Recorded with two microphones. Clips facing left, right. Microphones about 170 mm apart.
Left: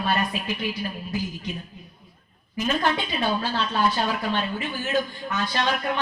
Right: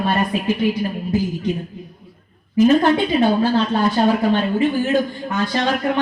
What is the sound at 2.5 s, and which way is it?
A woman's voice, 30° right (ahead or behind).